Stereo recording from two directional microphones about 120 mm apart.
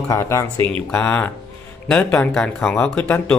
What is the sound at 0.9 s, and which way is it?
Speech, 15° left (ahead or behind).